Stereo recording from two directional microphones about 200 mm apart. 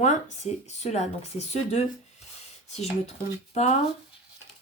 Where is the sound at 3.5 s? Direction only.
35° left (ahead or behind).